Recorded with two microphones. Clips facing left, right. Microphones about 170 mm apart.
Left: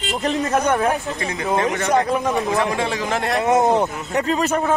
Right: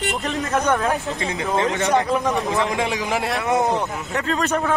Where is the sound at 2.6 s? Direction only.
15° right (ahead or behind).